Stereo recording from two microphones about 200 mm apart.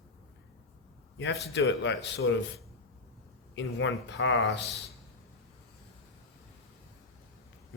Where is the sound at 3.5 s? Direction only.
65° left (ahead or behind).